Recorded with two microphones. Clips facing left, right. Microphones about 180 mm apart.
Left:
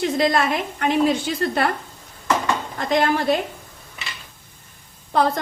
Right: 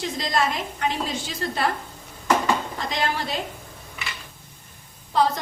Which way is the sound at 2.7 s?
55° left (ahead or behind).